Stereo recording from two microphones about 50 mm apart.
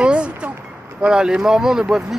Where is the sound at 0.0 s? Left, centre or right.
Right.